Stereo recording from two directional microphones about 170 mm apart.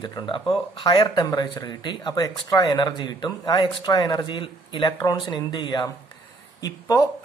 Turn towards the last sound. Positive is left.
turn(degrees=20)  # may be behind; listen again after turning